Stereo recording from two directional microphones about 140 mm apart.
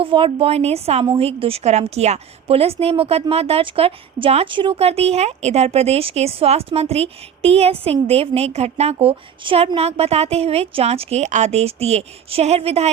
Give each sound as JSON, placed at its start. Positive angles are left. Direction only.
{"t": 0.0, "sound": "a woman's voice", "side_deg": -40}